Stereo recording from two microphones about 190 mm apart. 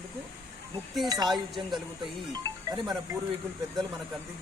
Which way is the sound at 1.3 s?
Centre (ahead or behind).